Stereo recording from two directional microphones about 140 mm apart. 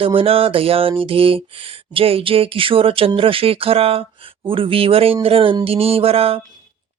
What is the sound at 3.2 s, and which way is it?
Speech, 40° right (ahead or behind).